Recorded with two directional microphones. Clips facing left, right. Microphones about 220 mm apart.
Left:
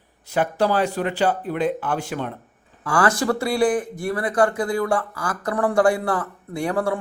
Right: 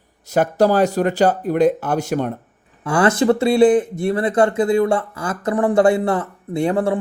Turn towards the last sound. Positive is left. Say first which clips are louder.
# right 5 dB
turn(degrees=-20)  # may be behind; listen again after turning